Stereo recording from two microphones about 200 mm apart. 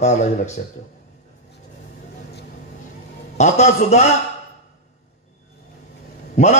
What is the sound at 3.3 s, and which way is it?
Speech, 35° left (ahead or behind).